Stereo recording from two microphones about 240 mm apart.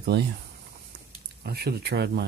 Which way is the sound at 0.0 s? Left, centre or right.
Right.